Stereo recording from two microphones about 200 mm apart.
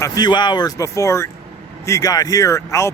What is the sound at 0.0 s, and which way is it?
Speech, 20° left (ahead or behind).